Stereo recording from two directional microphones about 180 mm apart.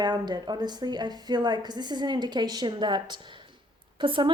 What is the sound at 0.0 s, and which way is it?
A woman's voice, 25° right (ahead or behind).